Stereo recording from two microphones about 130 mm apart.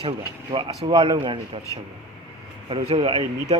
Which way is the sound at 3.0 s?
45° right (ahead or behind).